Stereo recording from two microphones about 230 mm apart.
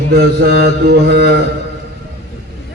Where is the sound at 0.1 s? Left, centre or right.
Right.